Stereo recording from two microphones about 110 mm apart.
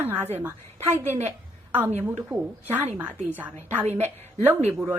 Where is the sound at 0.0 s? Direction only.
20° right (ahead or behind).